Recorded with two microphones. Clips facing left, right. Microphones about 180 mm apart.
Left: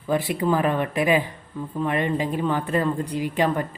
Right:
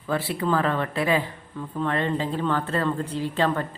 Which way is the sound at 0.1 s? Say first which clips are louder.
Left 2 dB; 15° left (ahead or behind).